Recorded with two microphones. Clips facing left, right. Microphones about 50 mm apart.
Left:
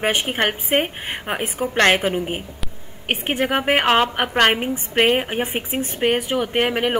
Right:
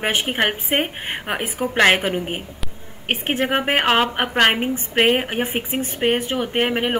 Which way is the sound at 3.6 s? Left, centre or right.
Centre.